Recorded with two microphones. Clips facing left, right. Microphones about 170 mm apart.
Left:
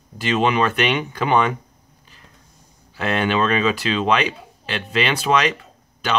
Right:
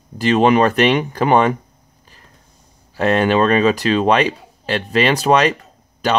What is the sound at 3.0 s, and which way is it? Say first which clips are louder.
Speech: right 6 dB; 40° right (ahead or behind).